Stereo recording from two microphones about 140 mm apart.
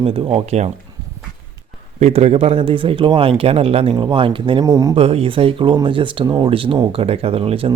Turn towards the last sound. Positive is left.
turn(degrees=-45)  # may be behind; listen again after turning